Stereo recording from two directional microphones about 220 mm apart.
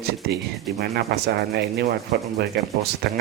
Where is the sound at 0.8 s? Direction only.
45° right (ahead or behind).